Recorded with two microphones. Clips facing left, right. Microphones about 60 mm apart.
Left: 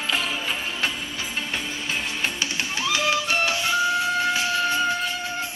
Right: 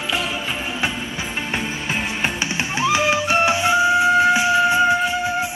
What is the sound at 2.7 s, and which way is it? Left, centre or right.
Music, right.